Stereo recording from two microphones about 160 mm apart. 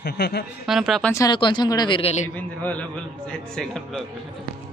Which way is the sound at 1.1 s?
25° left (ahead or behind).